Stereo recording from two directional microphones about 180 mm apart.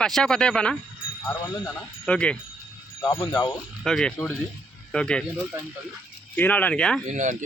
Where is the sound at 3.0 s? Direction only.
15° left (ahead or behind).